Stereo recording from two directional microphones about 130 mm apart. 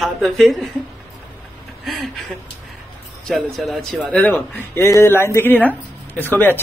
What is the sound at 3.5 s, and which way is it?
Speech, centre (ahead or behind).